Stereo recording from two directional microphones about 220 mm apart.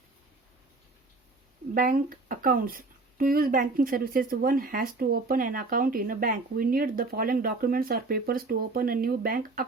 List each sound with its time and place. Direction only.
1.7 s speech: 40° right (ahead or behind)